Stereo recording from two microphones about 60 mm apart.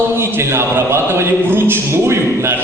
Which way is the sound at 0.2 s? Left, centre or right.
Right.